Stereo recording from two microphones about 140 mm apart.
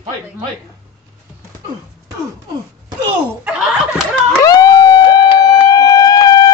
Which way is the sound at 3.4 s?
5° right (ahead or behind).